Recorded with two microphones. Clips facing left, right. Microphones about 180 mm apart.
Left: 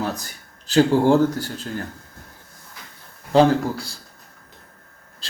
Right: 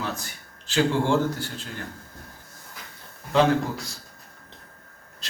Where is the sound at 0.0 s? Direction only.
40° left (ahead or behind).